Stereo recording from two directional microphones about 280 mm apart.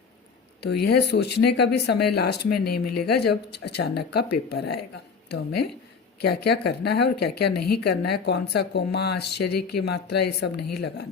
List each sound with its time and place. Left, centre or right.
0.6 s speech: left